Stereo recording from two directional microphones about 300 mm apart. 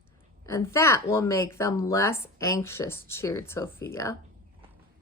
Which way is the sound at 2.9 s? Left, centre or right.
Left.